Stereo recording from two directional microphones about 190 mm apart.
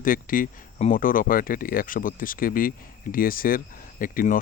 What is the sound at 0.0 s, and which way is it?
Speech, 45° left (ahead or behind).